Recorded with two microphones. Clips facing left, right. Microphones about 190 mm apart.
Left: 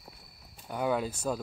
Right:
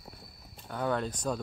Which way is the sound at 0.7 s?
10° left (ahead or behind).